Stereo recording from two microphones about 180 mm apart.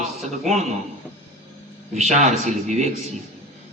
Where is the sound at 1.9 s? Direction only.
40° right (ahead or behind).